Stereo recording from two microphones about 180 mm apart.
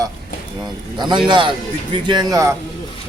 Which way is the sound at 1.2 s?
25° right (ahead or behind).